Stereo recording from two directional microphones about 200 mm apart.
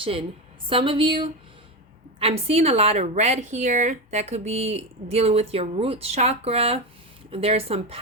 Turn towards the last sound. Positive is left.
turn(degrees=-30)  # may be behind; listen again after turning